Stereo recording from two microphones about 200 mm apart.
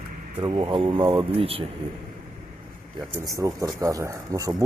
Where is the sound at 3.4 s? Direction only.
15° right (ahead or behind).